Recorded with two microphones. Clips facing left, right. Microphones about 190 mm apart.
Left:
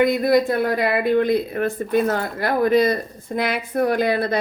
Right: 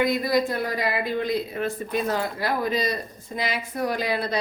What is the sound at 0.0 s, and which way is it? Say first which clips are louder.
Speech: left 5 dB; 55° left (ahead or behind).